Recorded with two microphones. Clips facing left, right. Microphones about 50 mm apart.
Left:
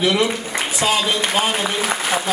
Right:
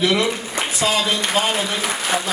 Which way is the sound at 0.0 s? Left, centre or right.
Centre.